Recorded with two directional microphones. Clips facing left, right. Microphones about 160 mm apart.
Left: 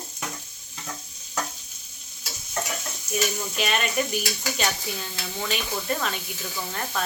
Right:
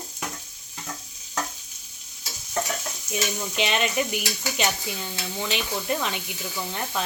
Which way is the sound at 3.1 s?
20° right (ahead or behind).